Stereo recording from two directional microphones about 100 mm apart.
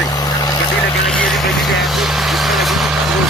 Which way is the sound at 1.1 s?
5° left (ahead or behind).